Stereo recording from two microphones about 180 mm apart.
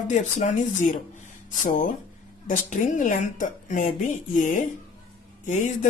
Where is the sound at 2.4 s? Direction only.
45° left (ahead or behind).